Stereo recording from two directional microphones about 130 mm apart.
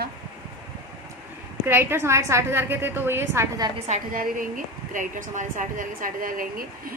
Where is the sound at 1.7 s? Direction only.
20° right (ahead or behind).